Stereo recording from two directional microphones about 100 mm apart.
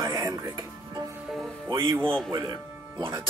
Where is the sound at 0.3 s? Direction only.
35° right (ahead or behind).